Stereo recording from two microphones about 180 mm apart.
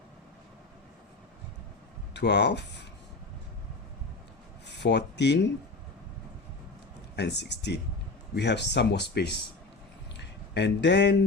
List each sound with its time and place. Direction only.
2.1 s speech: 70° left (ahead or behind)
4.7 s speech: 70° left (ahead or behind)
7.2 s speech: 70° left (ahead or behind)